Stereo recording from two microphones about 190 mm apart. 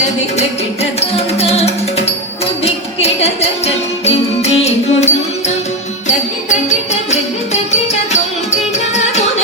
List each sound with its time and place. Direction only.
0.3 s music: 35° left (ahead or behind)
6.1 s music: 40° left (ahead or behind)